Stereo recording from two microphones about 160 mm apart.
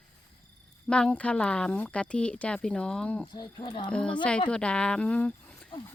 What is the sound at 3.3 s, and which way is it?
Speech, 25° left (ahead or behind).